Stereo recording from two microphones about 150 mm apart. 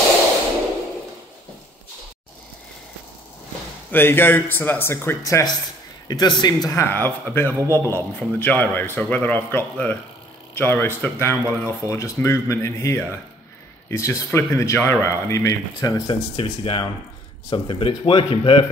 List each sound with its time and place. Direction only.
3.9 s speech: 15° left (ahead or behind)
7.5 s a man's voice: 20° right (ahead or behind)
7.8 s speech: 10° left (ahead or behind)
16.1 s speech: 35° left (ahead or behind)